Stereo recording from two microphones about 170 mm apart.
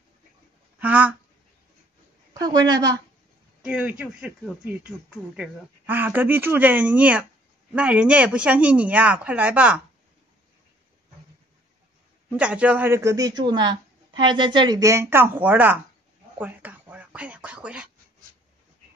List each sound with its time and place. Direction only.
0.7 s speech: 10° right (ahead or behind)
2.3 s a woman's voice: 25° right (ahead or behind)
3.6 s speech: 10° right (ahead or behind)
12.3 s speech: 5° right (ahead or behind)